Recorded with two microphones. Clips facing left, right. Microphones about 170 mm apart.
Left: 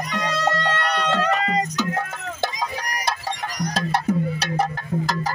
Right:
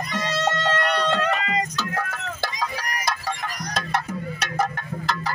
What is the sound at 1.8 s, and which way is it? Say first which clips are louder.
Music: left 2 dB; 25° left (ahead or behind).